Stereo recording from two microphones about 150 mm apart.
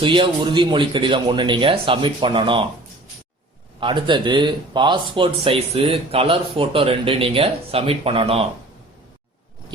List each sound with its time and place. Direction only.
0.0 s speech: 35° right (ahead or behind)
3.8 s speech: 35° right (ahead or behind)